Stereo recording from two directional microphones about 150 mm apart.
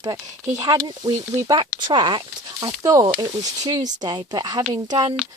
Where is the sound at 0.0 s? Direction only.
20° right (ahead or behind).